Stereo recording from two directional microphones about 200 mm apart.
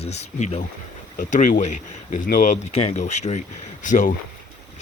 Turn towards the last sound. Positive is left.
turn(degrees=40)  # may be behind; listen again after turning